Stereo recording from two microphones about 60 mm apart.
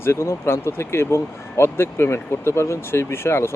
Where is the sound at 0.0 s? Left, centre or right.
Left.